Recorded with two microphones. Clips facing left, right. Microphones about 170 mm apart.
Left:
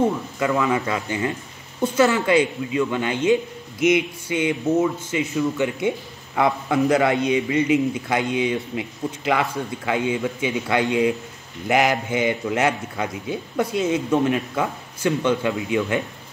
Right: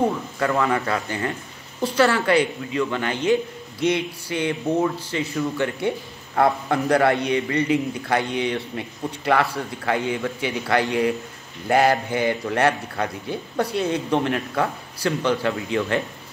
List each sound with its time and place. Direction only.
0.4 s speech: 15° left (ahead or behind)